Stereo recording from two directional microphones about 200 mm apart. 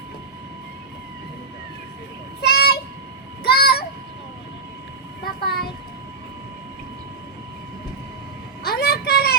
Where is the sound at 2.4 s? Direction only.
50° left (ahead or behind).